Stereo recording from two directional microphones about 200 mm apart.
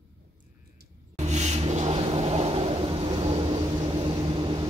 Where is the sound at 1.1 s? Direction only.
35° right (ahead or behind).